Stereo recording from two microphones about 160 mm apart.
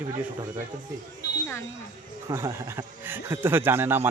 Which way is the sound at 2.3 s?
15° right (ahead or behind).